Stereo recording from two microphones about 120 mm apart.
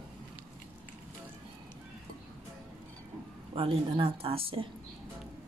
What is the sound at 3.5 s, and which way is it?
Speech, 50° right (ahead or behind).